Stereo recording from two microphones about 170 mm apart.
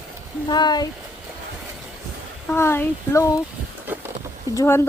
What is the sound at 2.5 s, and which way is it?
Speech, 15° left (ahead or behind).